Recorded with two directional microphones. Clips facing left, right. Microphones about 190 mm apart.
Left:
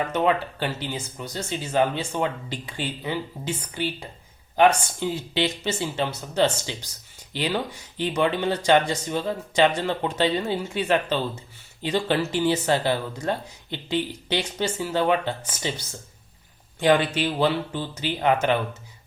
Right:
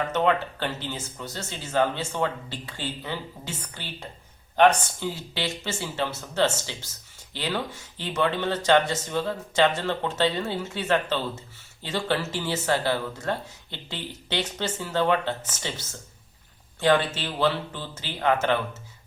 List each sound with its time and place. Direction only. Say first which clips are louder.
0.1 s speech: left 1 dB; 10° left (ahead or behind)
16.8 s speech: left 2 dB; 15° left (ahead or behind)